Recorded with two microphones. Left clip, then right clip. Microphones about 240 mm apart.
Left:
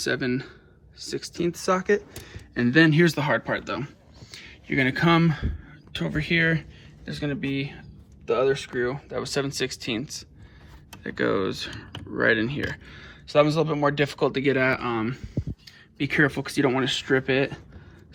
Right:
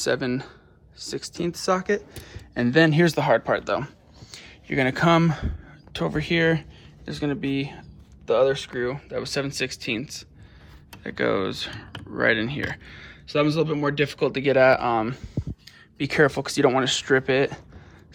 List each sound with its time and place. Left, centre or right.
0.0 s speech: centre
3.1 s speech: right
5.9 s speech: centre
8.4 s speech: centre
13.2 s speech: left
14.2 s speech: centre
14.4 s speech: centre; by 17.5 s right